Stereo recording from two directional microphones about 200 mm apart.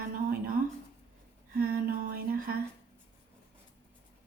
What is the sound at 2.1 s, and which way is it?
Speech, 45° right (ahead or behind).